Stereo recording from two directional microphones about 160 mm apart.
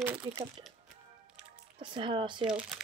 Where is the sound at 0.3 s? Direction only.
30° right (ahead or behind).